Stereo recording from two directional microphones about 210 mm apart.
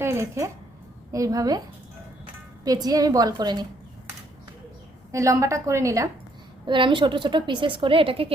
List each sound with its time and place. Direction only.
0.0 s a woman's voice: 10° right (ahead or behind)
2.6 s a woman's voice: 15° right (ahead or behind)
5.1 s a woman's voice: 15° right (ahead or behind)